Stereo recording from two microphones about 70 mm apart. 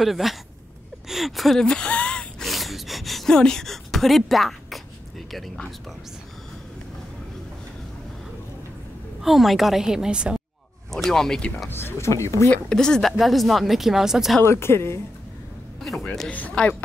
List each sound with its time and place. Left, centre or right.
0.0 s speech: centre
1.0 s gasp: centre
2.4 s gasp: centre
5.3 s speech: centre
9.2 s a woman's voice: centre
10.9 s speech: centre
11.7 s speech: left
12.6 s speech: centre
14.4 s speech: left
15.8 s speech: centre
16.3 s speech: centre